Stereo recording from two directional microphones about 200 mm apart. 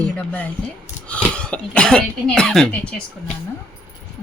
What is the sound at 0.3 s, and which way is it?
A man's voice, 10° left (ahead or behind).